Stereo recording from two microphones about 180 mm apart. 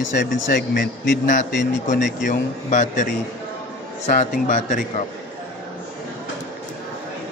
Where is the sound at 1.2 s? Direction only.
45° left (ahead or behind).